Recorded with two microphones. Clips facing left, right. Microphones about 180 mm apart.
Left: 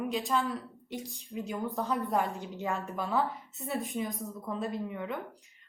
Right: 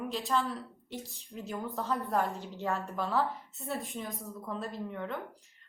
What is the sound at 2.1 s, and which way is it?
A woman's voice, 10° left (ahead or behind).